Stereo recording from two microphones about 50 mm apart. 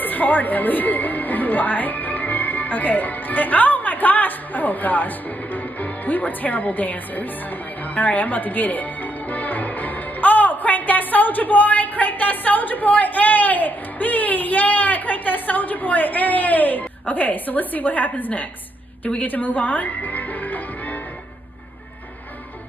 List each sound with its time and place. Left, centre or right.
0.0 s speech: left
19.2 s music: left